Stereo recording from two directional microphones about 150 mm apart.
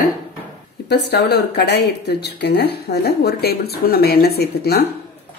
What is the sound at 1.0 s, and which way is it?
Speech, 90° left.